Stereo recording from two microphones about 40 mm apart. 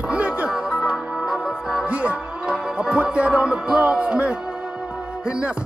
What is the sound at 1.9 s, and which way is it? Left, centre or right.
Speech, right.